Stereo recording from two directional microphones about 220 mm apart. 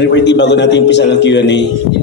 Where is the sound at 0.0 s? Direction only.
50° left (ahead or behind).